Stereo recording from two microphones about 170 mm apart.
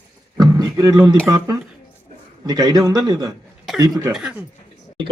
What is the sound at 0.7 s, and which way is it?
Speech, 20° right (ahead or behind).